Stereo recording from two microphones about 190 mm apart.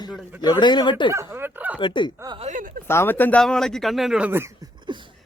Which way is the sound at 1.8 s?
25° left (ahead or behind).